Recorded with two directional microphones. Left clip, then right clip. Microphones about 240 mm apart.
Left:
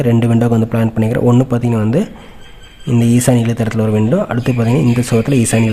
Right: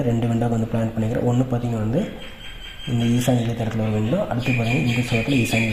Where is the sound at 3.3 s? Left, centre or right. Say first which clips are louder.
Left 8 dB; left.